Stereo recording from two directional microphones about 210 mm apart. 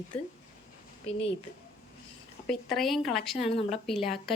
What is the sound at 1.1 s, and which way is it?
Speech, 30° left (ahead or behind).